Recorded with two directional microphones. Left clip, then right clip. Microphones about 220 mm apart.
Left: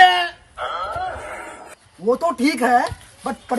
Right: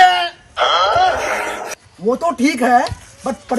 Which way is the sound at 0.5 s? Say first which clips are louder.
Right 12 dB; 30° right (ahead or behind).